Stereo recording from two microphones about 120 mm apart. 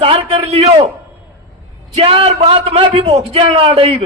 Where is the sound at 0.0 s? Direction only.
50° right (ahead or behind).